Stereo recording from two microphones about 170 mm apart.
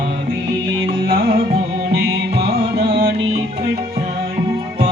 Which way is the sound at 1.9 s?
75° right (ahead or behind).